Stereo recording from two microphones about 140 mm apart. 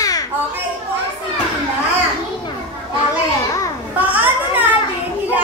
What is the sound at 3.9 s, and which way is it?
Children playing, 15° right (ahead or behind).